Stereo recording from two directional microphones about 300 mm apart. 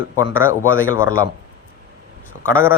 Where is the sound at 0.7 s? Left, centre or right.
Left.